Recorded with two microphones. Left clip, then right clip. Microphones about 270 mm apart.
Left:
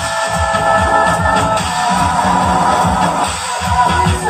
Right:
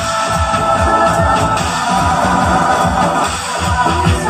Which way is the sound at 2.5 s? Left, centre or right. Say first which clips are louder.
Even; right.